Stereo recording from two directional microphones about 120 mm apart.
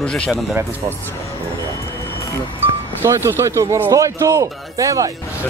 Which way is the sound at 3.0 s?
25° right (ahead or behind).